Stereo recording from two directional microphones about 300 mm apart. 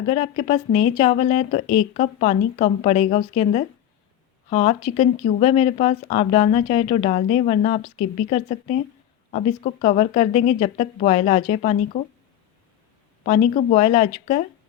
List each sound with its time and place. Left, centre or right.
0.1 s speech: left
13.2 s speech: left